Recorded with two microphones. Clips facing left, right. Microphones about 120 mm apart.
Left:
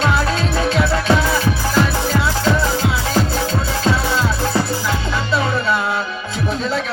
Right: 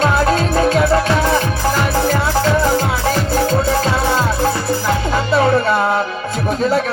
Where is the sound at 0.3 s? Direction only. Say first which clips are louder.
Right 5 dB; 45° right (ahead or behind).